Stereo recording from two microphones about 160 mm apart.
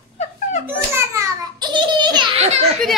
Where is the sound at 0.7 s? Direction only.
15° right (ahead or behind).